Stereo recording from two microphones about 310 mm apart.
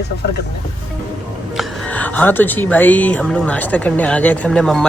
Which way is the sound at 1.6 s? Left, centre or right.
Centre.